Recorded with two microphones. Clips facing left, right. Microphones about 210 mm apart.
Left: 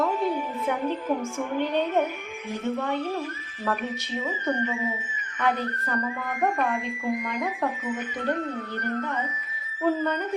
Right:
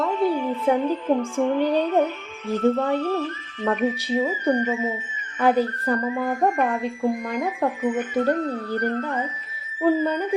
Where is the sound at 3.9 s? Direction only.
35° right (ahead or behind).